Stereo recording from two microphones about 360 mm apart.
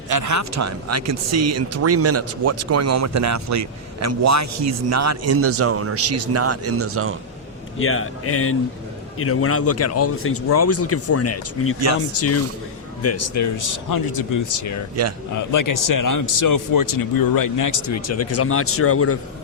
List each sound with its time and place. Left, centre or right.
0.1 s speech: right
7.8 s speech: left
15.0 s speech: right
15.5 s speech: left